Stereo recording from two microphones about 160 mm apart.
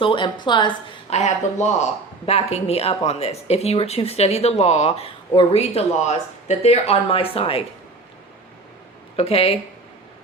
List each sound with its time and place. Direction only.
0.0 s a woman's voice: 30° left (ahead or behind)
1.1 s speech: 45° left (ahead or behind)
9.1 s speech: 40° left (ahead or behind)